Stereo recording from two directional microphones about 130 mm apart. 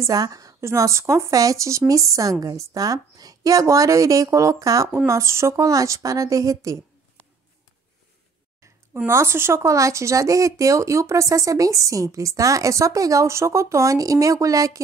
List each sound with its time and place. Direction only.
0.0 s speech: 30° right (ahead or behind)
8.5 s speech: 20° right (ahead or behind)